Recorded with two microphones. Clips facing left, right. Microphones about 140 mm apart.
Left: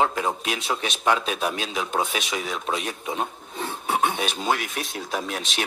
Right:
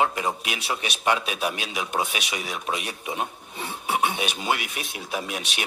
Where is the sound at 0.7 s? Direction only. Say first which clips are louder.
Left 1 dB; 15° right (ahead or behind).